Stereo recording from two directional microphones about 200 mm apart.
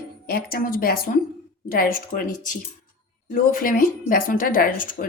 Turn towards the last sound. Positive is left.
turn(degrees=45)  # may be behind; listen again after turning